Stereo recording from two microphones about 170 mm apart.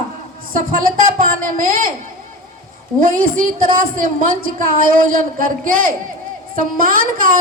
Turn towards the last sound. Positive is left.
turn(degrees=-55)  # may be behind; listen again after turning